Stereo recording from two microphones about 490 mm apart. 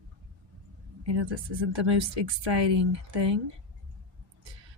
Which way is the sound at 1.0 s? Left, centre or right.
Right.